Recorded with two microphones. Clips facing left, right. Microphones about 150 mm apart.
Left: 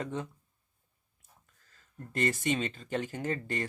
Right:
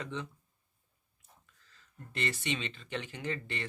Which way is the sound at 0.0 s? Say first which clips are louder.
Left 4 dB; 45° left (ahead or behind).